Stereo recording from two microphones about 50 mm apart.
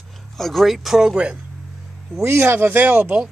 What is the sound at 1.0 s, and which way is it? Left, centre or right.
Speech, right.